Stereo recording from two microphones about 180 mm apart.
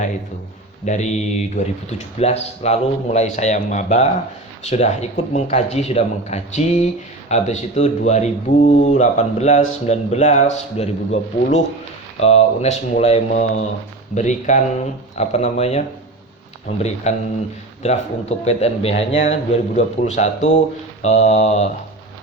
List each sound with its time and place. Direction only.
0.9 s a man's voice: 40° left (ahead or behind)
12.2 s a man's voice: 35° left (ahead or behind)